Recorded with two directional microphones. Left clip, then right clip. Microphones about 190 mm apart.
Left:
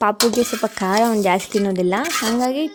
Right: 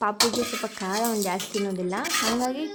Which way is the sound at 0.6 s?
45° left (ahead or behind).